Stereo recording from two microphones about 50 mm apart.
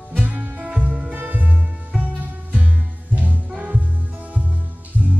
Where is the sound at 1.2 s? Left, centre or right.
Right.